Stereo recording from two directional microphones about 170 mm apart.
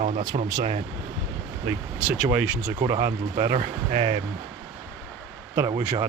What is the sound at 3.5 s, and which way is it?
Speech, 35° right (ahead or behind).